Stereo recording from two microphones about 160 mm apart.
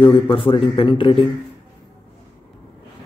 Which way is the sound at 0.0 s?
30° left (ahead or behind).